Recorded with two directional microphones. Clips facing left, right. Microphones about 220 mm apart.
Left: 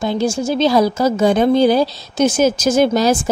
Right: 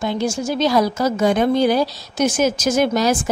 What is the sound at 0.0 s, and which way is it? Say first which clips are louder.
Speech: left 3 dB; 30° left (ahead or behind).